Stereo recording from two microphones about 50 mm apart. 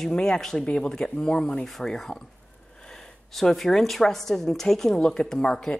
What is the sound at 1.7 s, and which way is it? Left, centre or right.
A woman's voice, centre.